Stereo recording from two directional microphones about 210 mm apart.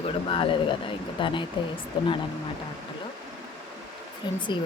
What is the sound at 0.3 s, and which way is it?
Speech, 25° left (ahead or behind).